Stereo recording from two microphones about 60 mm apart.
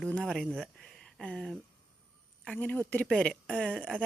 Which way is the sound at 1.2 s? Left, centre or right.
Centre.